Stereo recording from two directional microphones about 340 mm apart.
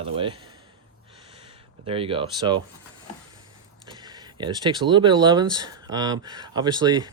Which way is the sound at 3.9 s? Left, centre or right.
Centre.